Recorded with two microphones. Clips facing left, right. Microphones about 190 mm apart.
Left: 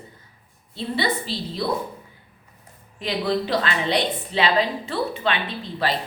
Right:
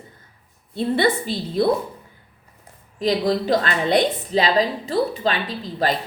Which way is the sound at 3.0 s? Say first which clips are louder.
Right 4 dB; 40° right (ahead or behind).